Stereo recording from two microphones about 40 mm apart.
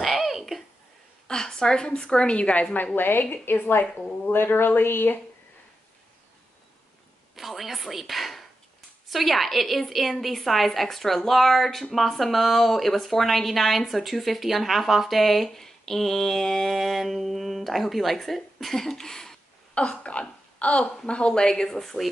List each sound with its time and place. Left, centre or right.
0.0 s a sound: centre
1.2 s a woman's voice: centre
3.0 s speech: left
7.3 s a woman's voice: centre
19.7 s a woman's voice: left
21.7 s a woman's voice: centre